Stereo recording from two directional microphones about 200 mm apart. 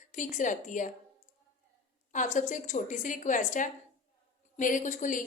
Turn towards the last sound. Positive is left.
turn(degrees=40)  # may be behind; listen again after turning